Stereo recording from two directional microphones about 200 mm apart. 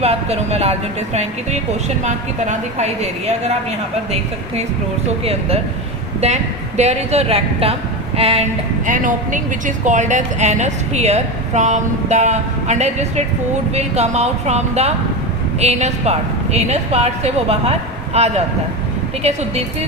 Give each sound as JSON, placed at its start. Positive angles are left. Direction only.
{"t": 0.0, "sound": "speech", "side_deg": -30}
{"t": 5.2, "sound": "speech", "side_deg": -30}
{"t": 8.9, "sound": "speech", "side_deg": -40}